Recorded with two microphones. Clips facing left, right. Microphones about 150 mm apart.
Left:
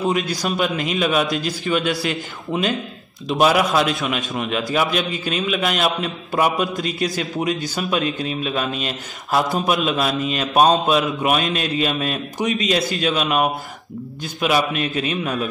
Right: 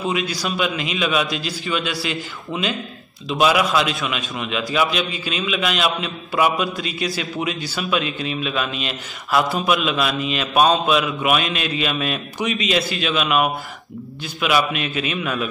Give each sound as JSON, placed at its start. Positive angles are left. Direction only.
{"t": 0.1, "sound": "a man's voice", "side_deg": 50}